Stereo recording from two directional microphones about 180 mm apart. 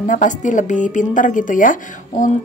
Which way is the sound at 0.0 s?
45° left (ahead or behind).